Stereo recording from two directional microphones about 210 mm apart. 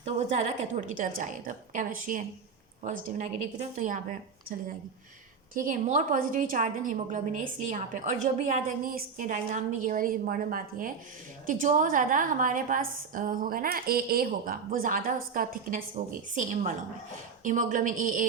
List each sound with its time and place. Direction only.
0.0 s a woman's voice: 30° right (ahead or behind)
5.5 s a woman's voice: 40° right (ahead or behind)